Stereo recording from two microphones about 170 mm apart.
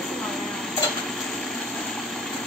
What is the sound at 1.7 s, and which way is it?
Engine, centre (ahead or behind).